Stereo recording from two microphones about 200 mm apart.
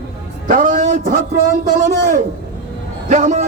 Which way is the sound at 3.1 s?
35° right (ahead or behind).